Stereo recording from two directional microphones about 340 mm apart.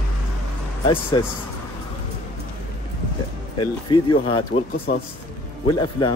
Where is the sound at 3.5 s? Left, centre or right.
Centre.